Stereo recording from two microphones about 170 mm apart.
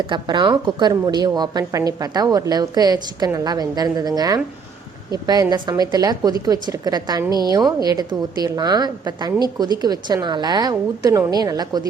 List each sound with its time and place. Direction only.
0.1 s a woman's voice: 30° right (ahead or behind)